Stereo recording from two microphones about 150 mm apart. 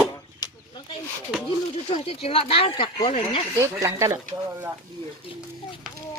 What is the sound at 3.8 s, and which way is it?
Speech, 20° right (ahead or behind).